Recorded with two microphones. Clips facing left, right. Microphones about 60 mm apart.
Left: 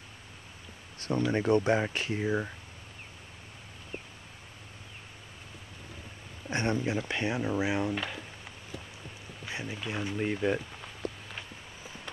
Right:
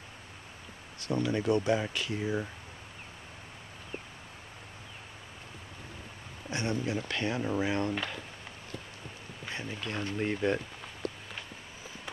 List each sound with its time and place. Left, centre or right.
1.3 s speech: left
6.5 s speech: left
6.8 s speech: centre
9.5 s speech: centre